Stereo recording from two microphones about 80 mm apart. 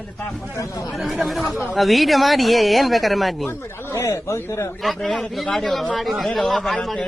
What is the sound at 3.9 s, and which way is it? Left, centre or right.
Speech, left.